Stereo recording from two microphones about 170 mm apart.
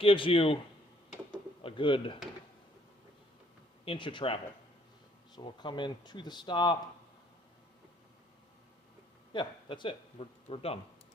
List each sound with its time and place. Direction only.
0.0 s speech: 30° left (ahead or behind)
1.6 s speech: 30° left (ahead or behind)
3.8 s speech: 30° left (ahead or behind)
9.3 s speech: 30° left (ahead or behind)